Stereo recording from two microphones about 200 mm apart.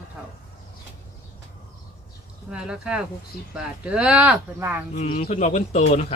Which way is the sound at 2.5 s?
5° right (ahead or behind).